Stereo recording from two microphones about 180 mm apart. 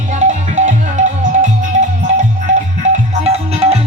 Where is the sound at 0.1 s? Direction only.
45° right (ahead or behind).